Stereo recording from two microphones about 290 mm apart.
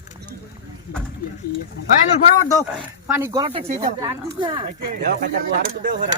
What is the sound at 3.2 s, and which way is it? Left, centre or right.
Speech, centre.